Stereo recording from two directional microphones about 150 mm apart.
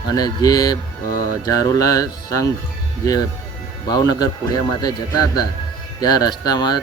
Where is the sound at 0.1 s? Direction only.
25° left (ahead or behind).